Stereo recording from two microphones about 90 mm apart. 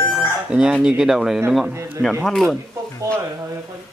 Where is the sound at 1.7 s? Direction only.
30° right (ahead or behind).